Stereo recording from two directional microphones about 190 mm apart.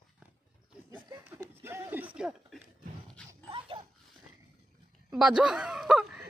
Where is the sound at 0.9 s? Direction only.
10° right (ahead or behind).